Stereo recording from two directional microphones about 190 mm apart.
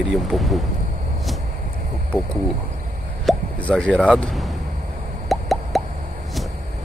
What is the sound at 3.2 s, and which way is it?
Speech, 5° left (ahead or behind).